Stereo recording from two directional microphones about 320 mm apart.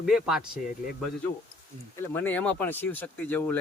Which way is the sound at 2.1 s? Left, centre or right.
Centre.